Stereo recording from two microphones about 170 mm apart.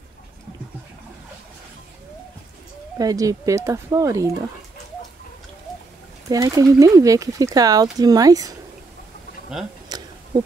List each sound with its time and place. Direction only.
3.0 s speech: 20° right (ahead or behind)
6.2 s speech: 20° right (ahead or behind)
9.8 s a sound: 25° right (ahead or behind)